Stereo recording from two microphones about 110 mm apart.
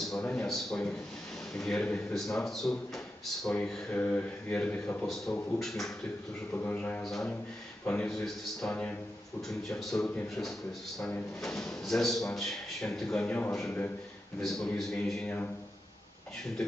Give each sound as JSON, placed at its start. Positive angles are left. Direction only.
{"t": 0.1, "sound": "a man's voice", "side_deg": 5}
{"t": 3.9, "sound": "a man's voice", "side_deg": 15}
{"t": 6.5, "sound": "a man's voice", "side_deg": 15}
{"t": 7.0, "sound": "a man's voice", "side_deg": 5}